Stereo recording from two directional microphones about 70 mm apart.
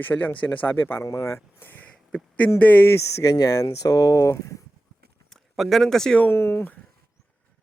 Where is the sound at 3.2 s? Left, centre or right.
Left.